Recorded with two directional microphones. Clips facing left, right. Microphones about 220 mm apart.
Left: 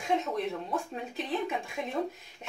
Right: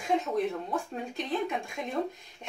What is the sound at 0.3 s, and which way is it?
Speech, centre (ahead or behind).